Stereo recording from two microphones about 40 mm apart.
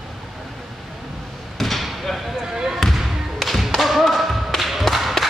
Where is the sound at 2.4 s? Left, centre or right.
Centre.